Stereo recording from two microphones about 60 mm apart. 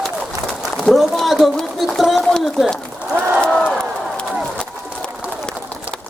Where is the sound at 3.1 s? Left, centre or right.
Right.